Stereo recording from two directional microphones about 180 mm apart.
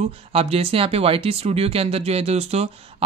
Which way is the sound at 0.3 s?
35° right (ahead or behind).